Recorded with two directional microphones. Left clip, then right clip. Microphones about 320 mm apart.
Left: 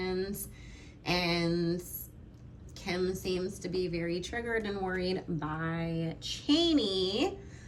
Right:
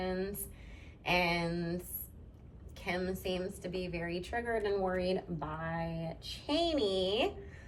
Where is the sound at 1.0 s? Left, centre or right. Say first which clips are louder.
Even; centre.